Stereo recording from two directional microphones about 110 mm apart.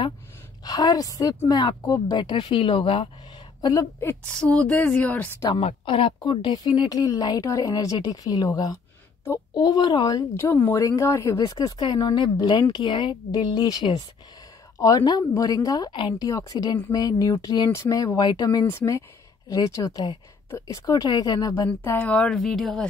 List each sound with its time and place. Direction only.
0.7 s a woman's voice: 35° left (ahead or behind); by 3.1 s 55° left (ahead or behind)
4.3 s a woman's voice: 10° left (ahead or behind)
5.6 s speech: 60° left (ahead or behind); by 8.5 s 35° left (ahead or behind)
9.5 s speech: 35° left (ahead or behind)
10.3 s speech: 20° left (ahead or behind); by 16.3 s 45° left (ahead or behind)
16.3 s speech: 35° left (ahead or behind)
18.7 s speech: 25° left (ahead or behind)
21.6 s a woman's voice: 15° left (ahead or behind)